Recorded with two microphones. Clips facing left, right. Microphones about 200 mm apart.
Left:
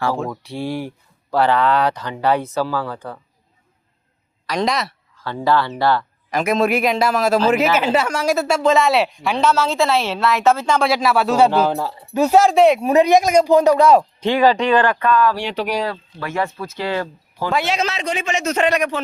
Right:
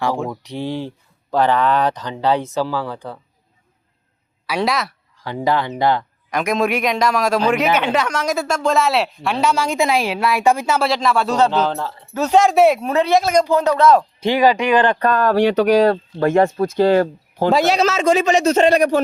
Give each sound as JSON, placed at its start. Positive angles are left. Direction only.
{"t": 0.0, "sound": "a woman's voice", "side_deg": -15}
{"t": 4.4, "sound": "a man's voice", "side_deg": -5}
{"t": 5.1, "sound": "a woman's voice", "side_deg": -15}
{"t": 6.3, "sound": "a man's voice", "side_deg": 0}
{"t": 9.4, "sound": "a woman's voice", "side_deg": -10}
{"t": 12.8, "sound": "speech", "side_deg": 15}
{"t": 14.2, "sound": "a woman's voice", "side_deg": -10}
{"t": 14.9, "sound": "speech", "side_deg": -45}
{"t": 15.7, "sound": "speech", "side_deg": -70}
{"t": 16.2, "sound": "speech", "side_deg": -45}